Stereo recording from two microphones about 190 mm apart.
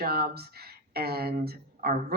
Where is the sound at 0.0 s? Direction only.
55° right (ahead or behind).